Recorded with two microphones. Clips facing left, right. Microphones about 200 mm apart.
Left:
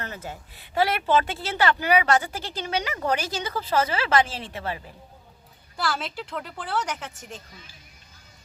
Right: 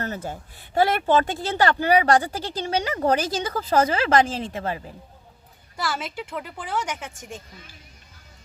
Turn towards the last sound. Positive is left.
turn(degrees=-10)  # may be behind; listen again after turning